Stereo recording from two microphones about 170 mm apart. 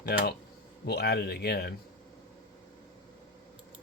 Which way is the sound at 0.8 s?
70° left (ahead or behind).